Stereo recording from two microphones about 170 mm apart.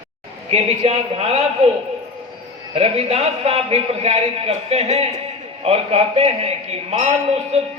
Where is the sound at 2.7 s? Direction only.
35° right (ahead or behind).